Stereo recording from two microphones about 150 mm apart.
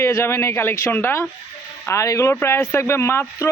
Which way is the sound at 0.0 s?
20° left (ahead or behind).